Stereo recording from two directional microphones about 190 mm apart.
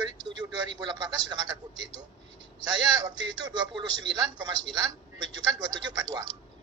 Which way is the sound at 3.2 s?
20° right (ahead or behind).